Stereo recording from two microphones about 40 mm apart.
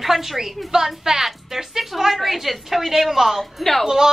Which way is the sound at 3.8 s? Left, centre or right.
Centre.